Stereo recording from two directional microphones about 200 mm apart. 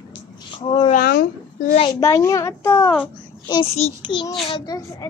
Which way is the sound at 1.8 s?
20° left (ahead or behind).